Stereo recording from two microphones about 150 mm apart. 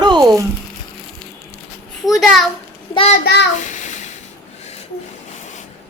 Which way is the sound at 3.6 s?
55° left (ahead or behind).